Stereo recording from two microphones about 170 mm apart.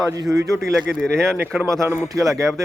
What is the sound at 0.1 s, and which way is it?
Speech, 20° right (ahead or behind).